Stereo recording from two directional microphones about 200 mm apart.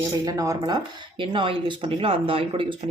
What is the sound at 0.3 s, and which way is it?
Speech, 15° right (ahead or behind).